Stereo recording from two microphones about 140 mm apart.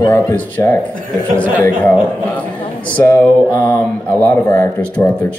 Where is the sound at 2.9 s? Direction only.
15° left (ahead or behind).